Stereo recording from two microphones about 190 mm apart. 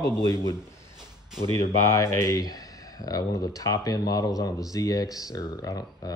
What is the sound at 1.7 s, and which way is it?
Speech, 15° left (ahead or behind).